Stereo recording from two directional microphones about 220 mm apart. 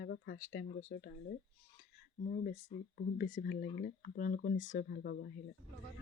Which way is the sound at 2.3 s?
35° left (ahead or behind).